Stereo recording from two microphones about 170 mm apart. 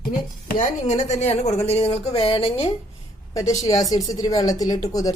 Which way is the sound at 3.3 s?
20° left (ahead or behind).